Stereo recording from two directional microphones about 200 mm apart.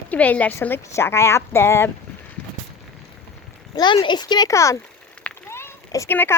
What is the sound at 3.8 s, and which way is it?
Speech, 20° left (ahead or behind).